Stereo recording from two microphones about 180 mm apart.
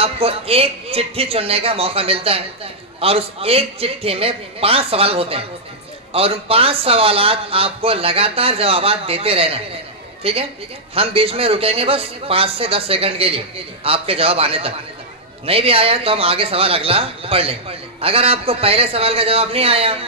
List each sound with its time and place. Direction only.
0.0 s a man's voice: 35° right (ahead or behind)